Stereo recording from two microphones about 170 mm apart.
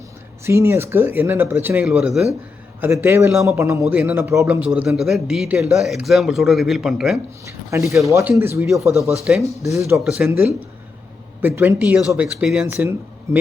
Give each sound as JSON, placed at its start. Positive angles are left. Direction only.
{"t": 0.4, "sound": "a man's voice", "side_deg": -15}
{"t": 7.4, "sound": "speech", "side_deg": -20}
{"t": 10.0, "sound": "a man's voice", "side_deg": -5}
{"t": 11.4, "sound": "speech", "side_deg": -15}